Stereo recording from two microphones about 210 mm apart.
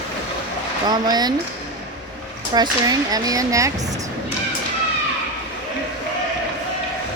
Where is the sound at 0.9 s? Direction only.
20° right (ahead or behind).